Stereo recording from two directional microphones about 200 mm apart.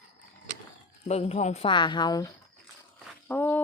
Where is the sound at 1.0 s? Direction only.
30° left (ahead or behind).